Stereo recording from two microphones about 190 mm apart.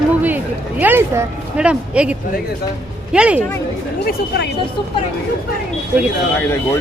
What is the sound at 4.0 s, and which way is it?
Speech, 55° left (ahead or behind).